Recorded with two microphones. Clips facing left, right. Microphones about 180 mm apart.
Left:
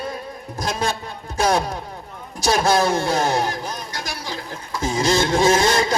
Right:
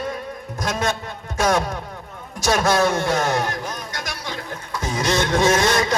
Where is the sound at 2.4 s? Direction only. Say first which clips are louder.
Even; 30° left (ahead or behind).